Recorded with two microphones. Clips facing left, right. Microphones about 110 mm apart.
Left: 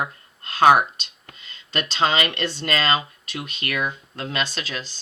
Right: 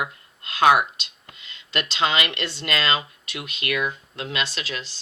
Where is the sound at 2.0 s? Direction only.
40° left (ahead or behind).